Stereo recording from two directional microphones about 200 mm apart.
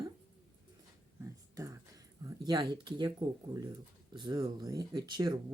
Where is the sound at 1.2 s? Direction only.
15° right (ahead or behind).